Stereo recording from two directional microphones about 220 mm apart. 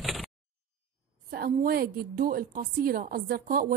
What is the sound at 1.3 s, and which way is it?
A woman's voice, 45° right (ahead or behind).